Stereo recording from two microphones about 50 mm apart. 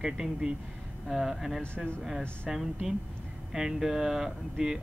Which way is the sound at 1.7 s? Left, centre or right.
Left.